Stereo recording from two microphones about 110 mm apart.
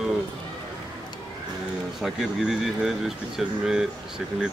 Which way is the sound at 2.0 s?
5° right (ahead or behind).